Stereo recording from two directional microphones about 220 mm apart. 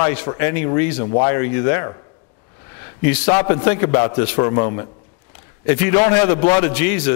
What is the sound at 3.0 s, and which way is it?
A man's voice, 15° left (ahead or behind).